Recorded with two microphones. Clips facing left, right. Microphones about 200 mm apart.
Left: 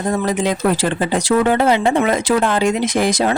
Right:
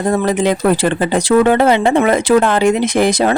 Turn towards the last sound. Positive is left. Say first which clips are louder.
# right 3 dB
turn(degrees=-60)  # may be behind; listen again after turning